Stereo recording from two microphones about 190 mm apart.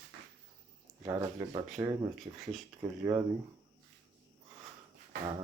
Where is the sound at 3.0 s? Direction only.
10° right (ahead or behind).